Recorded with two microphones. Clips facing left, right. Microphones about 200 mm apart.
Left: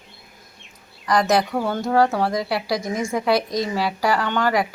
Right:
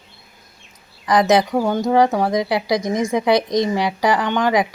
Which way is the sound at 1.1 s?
20° right (ahead or behind).